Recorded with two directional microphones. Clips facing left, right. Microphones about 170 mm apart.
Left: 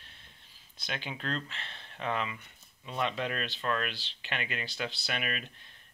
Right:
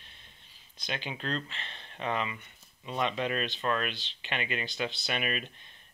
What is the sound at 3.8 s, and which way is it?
Speech, 20° right (ahead or behind).